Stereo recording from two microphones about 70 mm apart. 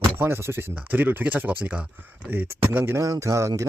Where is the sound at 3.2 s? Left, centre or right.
Right.